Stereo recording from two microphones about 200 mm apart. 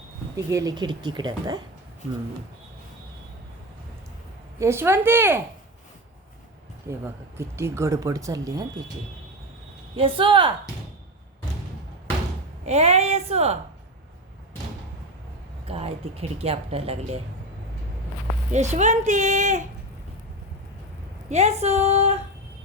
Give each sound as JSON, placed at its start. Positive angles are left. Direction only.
{"t": 0.3, "sound": "speech", "side_deg": -15}
{"t": 4.6, "sound": "speech", "side_deg": -10}
{"t": 6.8, "sound": "speech", "side_deg": -10}
{"t": 9.9, "sound": "speech", "side_deg": -25}
{"t": 12.6, "sound": "speech", "side_deg": -30}
{"t": 15.6, "sound": "speech", "side_deg": -30}
{"t": 18.5, "sound": "speech", "side_deg": -35}
{"t": 21.2, "sound": "speech", "side_deg": -35}